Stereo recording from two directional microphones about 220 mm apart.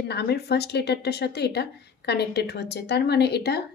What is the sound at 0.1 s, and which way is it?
Speech, 50° left (ahead or behind).